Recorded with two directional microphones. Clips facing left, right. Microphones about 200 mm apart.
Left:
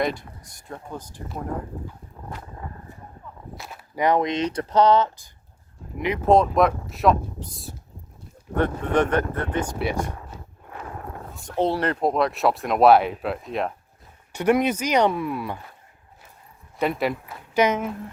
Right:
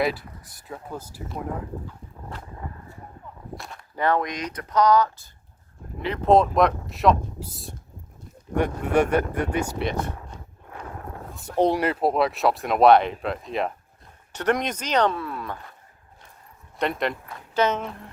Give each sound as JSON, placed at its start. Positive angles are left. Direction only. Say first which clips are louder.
{"t": 0.0, "sound": "speech", "louder": "even", "side_deg": -5}
{"t": 3.5, "sound": "speech", "louder": "even", "side_deg": 5}
{"t": 6.2, "sound": "speech", "louder": "even", "side_deg": 0}
{"t": 9.7, "sound": "speech", "louder": "left 1 dB", "side_deg": 10}
{"t": 11.4, "sound": "speech", "louder": "right 2 dB", "side_deg": -15}
{"t": 16.7, "sound": "speech", "louder": "left 2 dB", "side_deg": 5}